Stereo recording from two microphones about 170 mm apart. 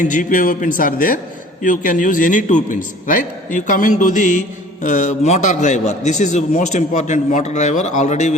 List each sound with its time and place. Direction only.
0.0 s a man's voice: 50° left (ahead or behind)